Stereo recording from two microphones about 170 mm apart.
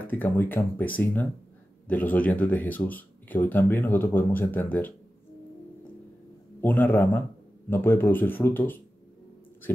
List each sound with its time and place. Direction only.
0.0 s speech: 10° left (ahead or behind)
6.6 s speech: 10° left (ahead or behind)